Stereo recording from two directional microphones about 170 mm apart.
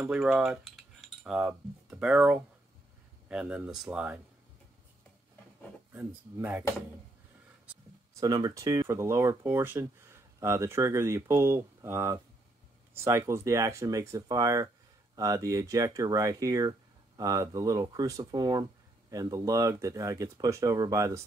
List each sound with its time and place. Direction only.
0.0 s cutlery: 5° right (ahead or behind)
3.3 s speech: 5° right (ahead or behind)
5.9 s speech: 15° right (ahead or behind)
8.1 s speech: 20° right (ahead or behind)